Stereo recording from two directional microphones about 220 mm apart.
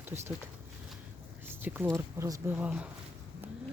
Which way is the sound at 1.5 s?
10° right (ahead or behind).